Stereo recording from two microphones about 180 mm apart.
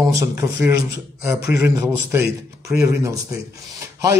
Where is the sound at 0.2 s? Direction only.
15° right (ahead or behind).